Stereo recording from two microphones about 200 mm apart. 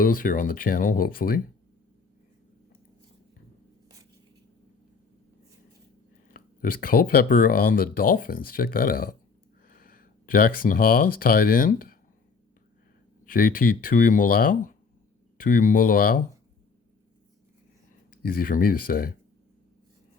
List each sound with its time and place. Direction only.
0.0 s speech: 45° left (ahead or behind)
6.3 s speech: 45° left (ahead or behind)
13.2 s speech: 45° left (ahead or behind)
18.2 s speech: 45° left (ahead or behind)